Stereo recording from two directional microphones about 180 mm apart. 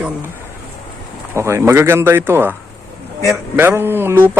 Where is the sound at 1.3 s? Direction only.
15° right (ahead or behind).